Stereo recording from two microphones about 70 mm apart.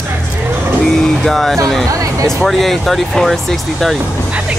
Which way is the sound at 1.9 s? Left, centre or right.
Right.